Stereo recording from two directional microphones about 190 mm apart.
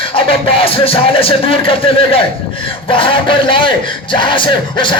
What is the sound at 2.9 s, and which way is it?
Speech, 25° left (ahead or behind).